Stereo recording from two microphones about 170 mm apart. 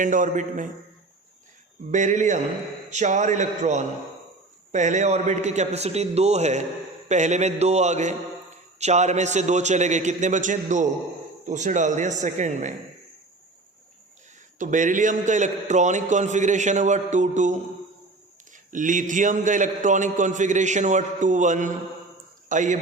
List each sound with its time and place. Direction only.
0.0 s a man's voice: 50° right (ahead or behind)
1.9 s a man's voice: 45° right (ahead or behind)
14.6 s a man's voice: 50° right (ahead or behind)